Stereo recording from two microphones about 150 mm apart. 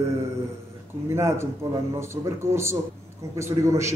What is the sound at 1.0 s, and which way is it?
A man's voice, 15° right (ahead or behind).